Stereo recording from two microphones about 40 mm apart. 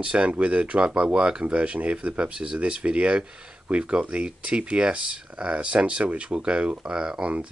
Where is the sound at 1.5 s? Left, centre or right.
Right.